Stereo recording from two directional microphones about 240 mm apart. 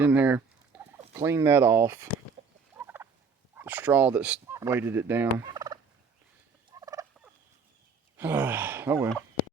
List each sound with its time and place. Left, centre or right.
0.0 s fowl: centre
1.1 s speech: centre
2.4 s fowl: right
2.7 s gobble: centre
3.6 s turkey: centre
6.7 s gobble: centre
8.1 s speech: centre